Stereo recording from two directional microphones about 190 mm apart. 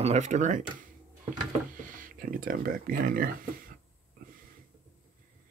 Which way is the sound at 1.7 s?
45° right (ahead or behind).